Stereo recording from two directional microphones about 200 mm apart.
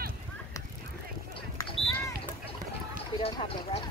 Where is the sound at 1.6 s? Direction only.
20° left (ahead or behind).